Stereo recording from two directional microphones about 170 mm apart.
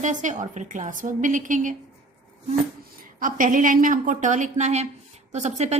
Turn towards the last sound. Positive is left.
turn(degrees=-40)  # may be behind; listen again after turning